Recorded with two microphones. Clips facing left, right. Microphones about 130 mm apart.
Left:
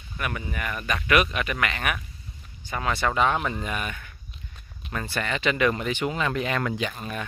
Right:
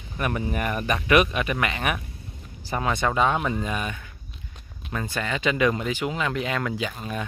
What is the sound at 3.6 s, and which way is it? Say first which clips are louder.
Speech: right 2 dB; 20° right (ahead or behind).